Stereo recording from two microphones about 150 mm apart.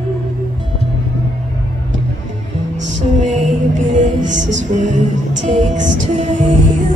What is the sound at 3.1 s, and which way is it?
Music, 50° right (ahead or behind).